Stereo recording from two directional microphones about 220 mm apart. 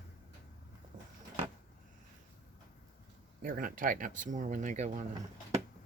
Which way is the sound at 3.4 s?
40° right (ahead or behind).